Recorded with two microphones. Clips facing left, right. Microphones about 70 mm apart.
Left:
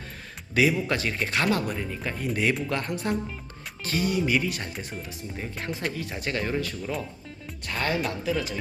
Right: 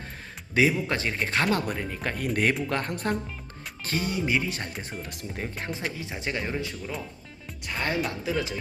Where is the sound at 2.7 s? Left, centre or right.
Right.